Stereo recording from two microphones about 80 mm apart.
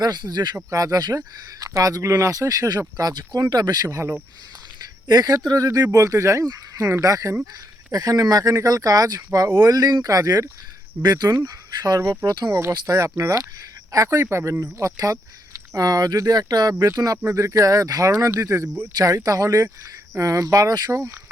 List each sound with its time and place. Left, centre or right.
0.0 s speech: right
0.5 s speech: right
3.8 s speech: right
5.0 s speech: right
5.5 s speech: right
5.9 s speech: right
11.0 s speech: right
12.9 s speech: right
16.7 s speech: right
17.0 s speech: right